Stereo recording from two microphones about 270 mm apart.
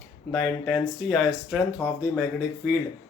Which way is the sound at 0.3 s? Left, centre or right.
Centre.